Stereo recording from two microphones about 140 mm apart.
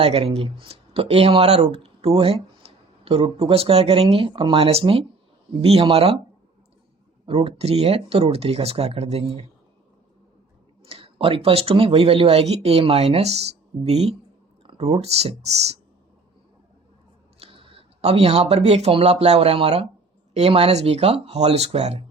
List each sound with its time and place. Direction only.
0.0 s speech: 45° right (ahead or behind)
7.3 s speech: 45° right (ahead or behind)
10.8 s speech: 40° right (ahead or behind)
17.4 s speech: 40° right (ahead or behind)